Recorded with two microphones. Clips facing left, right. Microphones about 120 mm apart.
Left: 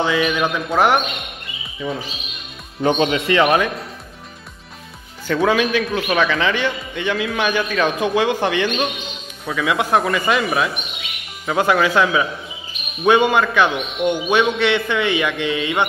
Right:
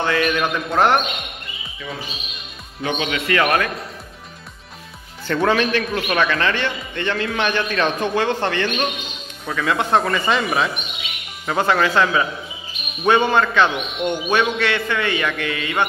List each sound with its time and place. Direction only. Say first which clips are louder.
0.0 s a man's voice: left 1 dB; 10° left (ahead or behind)
2.8 s speech: left 6 dB; 35° left (ahead or behind)
5.2 s a man's voice: left 1 dB; 5° left (ahead or behind)